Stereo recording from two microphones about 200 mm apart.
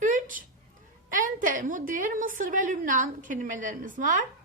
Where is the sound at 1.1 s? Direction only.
40° right (ahead or behind).